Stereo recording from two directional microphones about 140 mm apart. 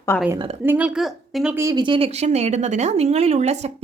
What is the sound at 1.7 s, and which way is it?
Speech, 35° right (ahead or behind).